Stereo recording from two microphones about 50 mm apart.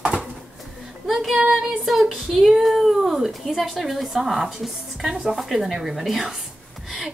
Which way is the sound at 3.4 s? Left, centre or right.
Centre.